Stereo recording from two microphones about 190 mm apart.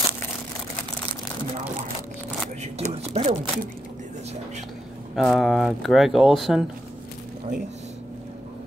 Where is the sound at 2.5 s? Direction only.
35° right (ahead or behind).